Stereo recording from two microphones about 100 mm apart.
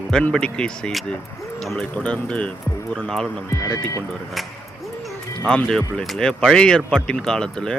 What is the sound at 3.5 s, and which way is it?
Speech, 30° left (ahead or behind).